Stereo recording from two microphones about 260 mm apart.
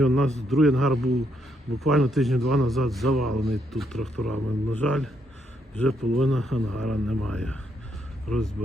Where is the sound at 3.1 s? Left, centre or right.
Right.